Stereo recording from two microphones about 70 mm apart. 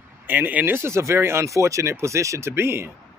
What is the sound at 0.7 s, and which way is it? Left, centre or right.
Speech, right.